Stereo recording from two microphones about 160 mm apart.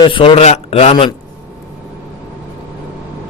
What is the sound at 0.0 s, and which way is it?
A man's voice, 30° left (ahead or behind).